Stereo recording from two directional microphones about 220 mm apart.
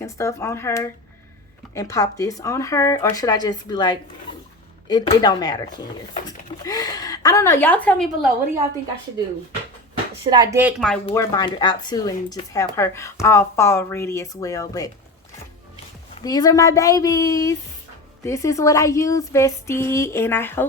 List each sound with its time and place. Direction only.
0.0 s speech: 15° left (ahead or behind)
10.2 s speech: 20° right (ahead or behind)
10.6 s speech: 5° right (ahead or behind)
11.1 s speech: 15° left (ahead or behind)
16.2 s speech: 15° left (ahead or behind)